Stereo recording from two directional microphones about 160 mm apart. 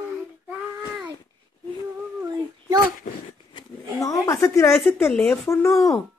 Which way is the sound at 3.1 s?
55° left (ahead or behind).